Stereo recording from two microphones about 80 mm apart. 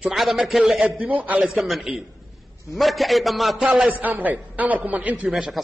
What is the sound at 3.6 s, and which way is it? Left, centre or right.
A man's voice, centre.